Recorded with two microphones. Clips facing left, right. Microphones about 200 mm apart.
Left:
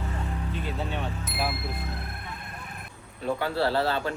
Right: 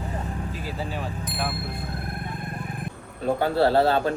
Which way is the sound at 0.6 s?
Centre (ahead or behind).